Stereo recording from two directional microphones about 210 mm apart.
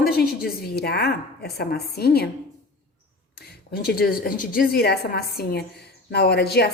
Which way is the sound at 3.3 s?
50° left (ahead or behind).